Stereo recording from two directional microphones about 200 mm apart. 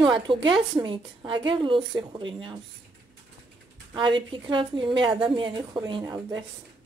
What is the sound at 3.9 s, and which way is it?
A woman's voice, 25° right (ahead or behind).